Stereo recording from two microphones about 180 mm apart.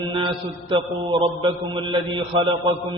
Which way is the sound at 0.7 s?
30° right (ahead or behind).